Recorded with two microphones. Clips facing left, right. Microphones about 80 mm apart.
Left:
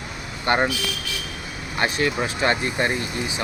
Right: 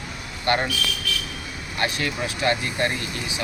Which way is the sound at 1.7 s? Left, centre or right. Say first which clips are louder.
Left 4 dB; left.